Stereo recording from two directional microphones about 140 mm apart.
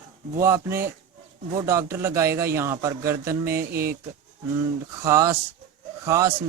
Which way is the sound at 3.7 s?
90° right.